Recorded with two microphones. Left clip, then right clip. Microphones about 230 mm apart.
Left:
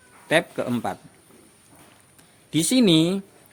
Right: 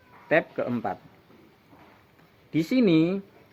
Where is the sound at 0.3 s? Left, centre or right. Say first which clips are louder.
Left 2 dB; left.